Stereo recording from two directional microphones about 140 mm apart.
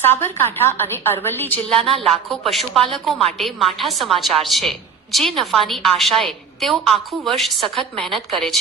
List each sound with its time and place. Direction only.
0.0 s a woman's voice: 15° left (ahead or behind)
2.0 s a woman's voice: centre (ahead or behind)